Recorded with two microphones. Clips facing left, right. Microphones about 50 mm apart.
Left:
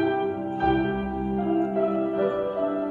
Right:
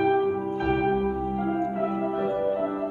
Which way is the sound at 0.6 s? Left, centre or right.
Right.